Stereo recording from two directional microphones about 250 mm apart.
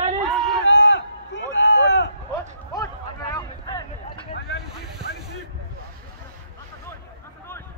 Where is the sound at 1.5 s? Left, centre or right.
Left.